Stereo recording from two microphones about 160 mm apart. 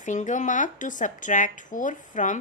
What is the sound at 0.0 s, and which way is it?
A woman's voice, 50° left (ahead or behind).